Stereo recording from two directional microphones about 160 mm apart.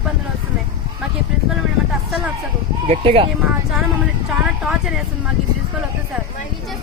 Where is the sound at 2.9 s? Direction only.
35° right (ahead or behind).